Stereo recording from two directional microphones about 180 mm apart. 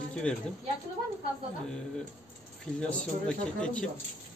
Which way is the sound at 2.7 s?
5° left (ahead or behind).